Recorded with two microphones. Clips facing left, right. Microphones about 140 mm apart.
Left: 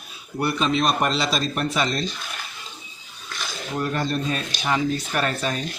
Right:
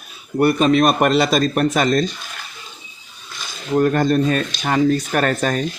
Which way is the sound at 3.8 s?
50° right (ahead or behind).